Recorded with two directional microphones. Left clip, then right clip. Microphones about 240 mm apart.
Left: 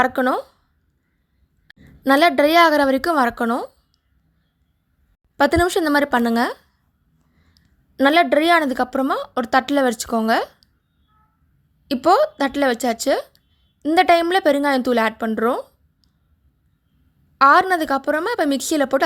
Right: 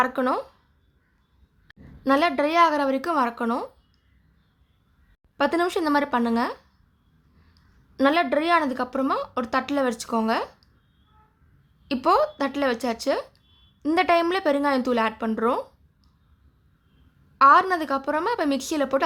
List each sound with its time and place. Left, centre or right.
0.0 s a woman's voice: left
1.7 s a woman's voice: left
5.4 s a woman's voice: left
7.9 s a woman's voice: left
11.9 s a woman's voice: left
17.3 s a woman's voice: left